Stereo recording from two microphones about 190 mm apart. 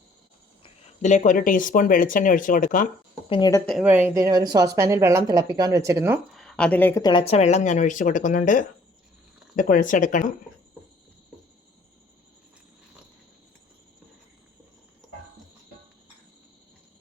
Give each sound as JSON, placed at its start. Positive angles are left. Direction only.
{"t": 0.6, "sound": "speech", "side_deg": 40}
{"t": 3.2, "sound": "speech", "side_deg": 25}
{"t": 3.7, "sound": "speech", "side_deg": -5}
{"t": 6.3, "sound": "speech", "side_deg": 5}
{"t": 7.0, "sound": "speech", "side_deg": 25}